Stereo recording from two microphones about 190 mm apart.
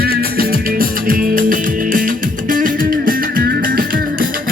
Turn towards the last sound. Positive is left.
turn(degrees=-50)  # may be behind; listen again after turning